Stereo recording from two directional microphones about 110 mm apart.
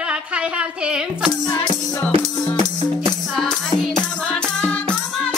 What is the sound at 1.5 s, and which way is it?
Music, 15° left (ahead or behind).